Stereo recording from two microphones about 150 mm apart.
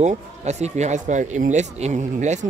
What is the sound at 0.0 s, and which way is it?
Speech, 50° right (ahead or behind).